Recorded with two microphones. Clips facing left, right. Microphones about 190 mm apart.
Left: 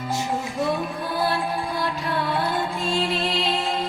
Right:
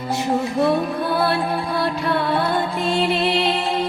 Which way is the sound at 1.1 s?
65° right (ahead or behind).